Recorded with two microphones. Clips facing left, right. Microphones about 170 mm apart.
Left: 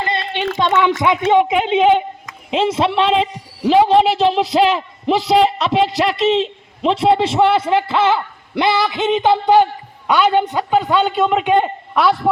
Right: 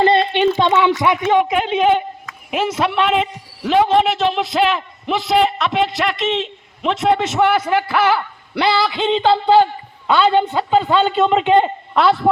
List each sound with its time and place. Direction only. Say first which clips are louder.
0.0 s a sound: right 9 dB; 30° right (ahead or behind)
1.0 s a woman's voice: left 1 dB; 20° left (ahead or behind)
10.8 s a man's voice: right 1 dB; centre (ahead or behind)